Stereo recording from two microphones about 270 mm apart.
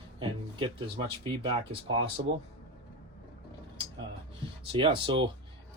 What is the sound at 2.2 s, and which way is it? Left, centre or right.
Speech, right.